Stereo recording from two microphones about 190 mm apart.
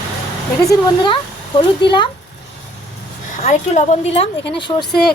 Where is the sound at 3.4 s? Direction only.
40° left (ahead or behind).